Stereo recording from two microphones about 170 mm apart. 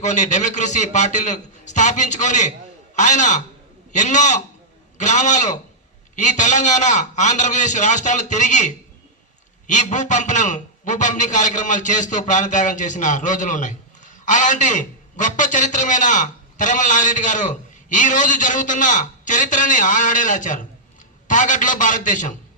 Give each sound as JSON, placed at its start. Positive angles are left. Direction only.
{"t": 0.0, "sound": "a man's voice", "side_deg": 45}